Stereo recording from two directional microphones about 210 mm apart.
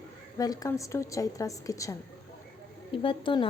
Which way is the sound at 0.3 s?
15° left (ahead or behind).